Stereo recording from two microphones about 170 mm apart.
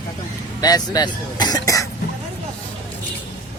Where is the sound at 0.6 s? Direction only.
20° left (ahead or behind).